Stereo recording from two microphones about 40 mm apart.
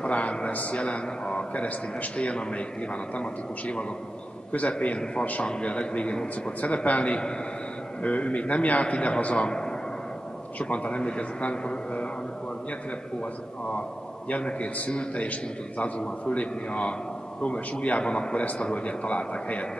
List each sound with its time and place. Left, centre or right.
0.0 s a man's voice: left
14.3 s a man's voice: left
16.3 s a man's voice: left